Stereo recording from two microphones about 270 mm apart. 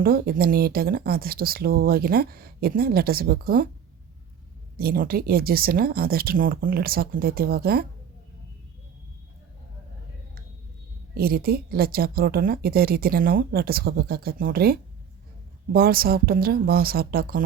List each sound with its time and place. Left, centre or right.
0.0 s speech: right
4.8 s speech: right
11.1 s speech: right